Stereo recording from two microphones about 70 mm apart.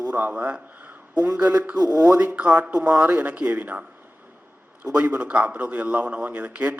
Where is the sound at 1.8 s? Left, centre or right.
Right.